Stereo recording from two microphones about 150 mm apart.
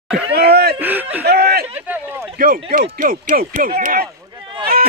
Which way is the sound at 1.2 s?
90° right.